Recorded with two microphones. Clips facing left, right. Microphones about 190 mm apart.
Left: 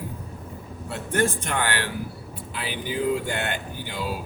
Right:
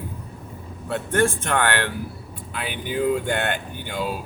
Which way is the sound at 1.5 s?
60° right (ahead or behind).